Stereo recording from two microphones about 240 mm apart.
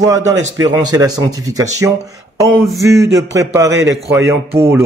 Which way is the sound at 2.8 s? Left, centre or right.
Centre.